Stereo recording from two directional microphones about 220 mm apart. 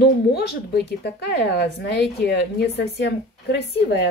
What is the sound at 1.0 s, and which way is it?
A woman's voice, 50° left (ahead or behind).